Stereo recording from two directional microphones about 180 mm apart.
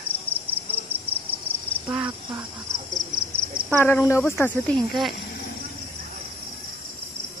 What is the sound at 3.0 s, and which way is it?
Cricket, 25° right (ahead or behind).